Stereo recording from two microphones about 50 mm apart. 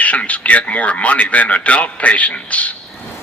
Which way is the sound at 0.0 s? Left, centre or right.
Left.